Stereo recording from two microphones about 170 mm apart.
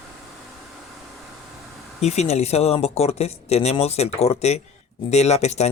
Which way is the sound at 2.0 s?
40° left (ahead or behind).